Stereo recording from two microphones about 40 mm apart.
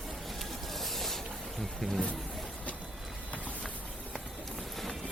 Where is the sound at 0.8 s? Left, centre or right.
Centre.